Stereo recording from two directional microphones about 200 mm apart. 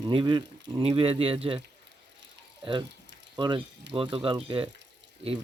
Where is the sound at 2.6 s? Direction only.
25° right (ahead or behind).